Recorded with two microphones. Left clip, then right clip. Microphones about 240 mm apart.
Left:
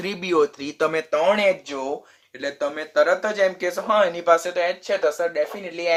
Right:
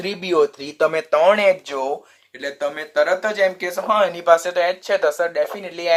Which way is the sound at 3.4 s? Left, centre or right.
Right.